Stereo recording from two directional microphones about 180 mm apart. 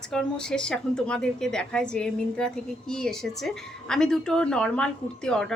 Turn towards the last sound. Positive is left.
turn(degrees=5)  # may be behind; listen again after turning